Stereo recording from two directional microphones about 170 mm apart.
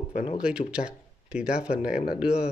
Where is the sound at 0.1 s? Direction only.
45° left (ahead or behind).